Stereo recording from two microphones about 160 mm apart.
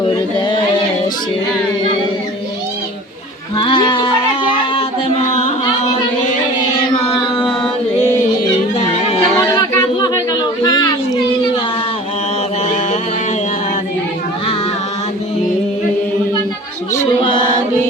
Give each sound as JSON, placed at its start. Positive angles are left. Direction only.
{"t": 0.0, "sound": "a sound", "side_deg": 30}
{"t": 3.6, "sound": "music", "side_deg": 30}
{"t": 9.2, "sound": "chatter", "side_deg": 25}